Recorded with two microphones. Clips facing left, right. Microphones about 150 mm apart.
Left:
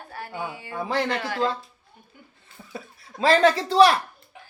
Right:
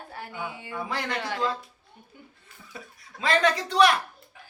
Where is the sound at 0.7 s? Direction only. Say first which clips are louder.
Left 6 dB; 30° left (ahead or behind).